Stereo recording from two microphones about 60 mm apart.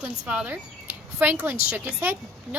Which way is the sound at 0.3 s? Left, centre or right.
Centre.